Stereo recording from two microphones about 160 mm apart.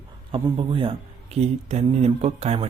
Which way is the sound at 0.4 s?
30° right (ahead or behind).